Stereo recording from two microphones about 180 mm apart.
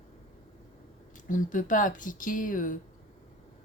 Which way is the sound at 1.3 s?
45° left (ahead or behind).